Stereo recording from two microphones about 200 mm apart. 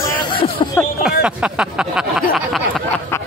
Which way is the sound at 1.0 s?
5° right (ahead or behind).